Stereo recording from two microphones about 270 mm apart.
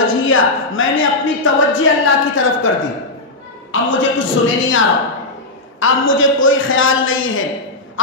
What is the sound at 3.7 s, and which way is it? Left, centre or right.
Speech, left.